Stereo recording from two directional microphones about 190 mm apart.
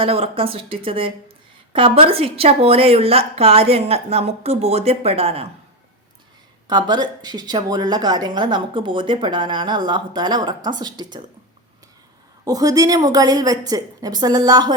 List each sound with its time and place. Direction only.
0.0 s a woman's voice: 30° right (ahead or behind)
6.7 s a woman's voice: 20° right (ahead or behind)
12.5 s a woman's voice: 20° right (ahead or behind)